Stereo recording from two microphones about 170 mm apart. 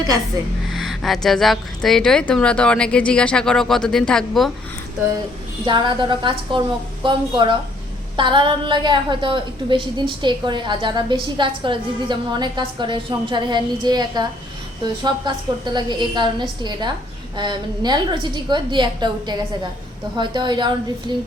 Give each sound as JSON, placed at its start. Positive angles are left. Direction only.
{"t": 0.7, "sound": "a woman's voice", "side_deg": 0}
{"t": 5.6, "sound": "a woman's voice", "side_deg": -30}